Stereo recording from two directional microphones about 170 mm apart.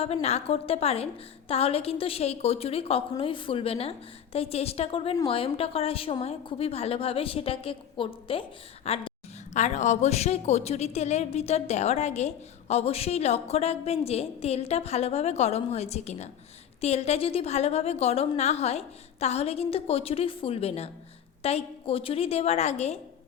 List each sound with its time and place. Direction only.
0.0 s a woman's voice: 35° left (ahead or behind)